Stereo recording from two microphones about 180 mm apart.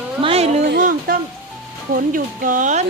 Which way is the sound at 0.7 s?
55° right (ahead or behind).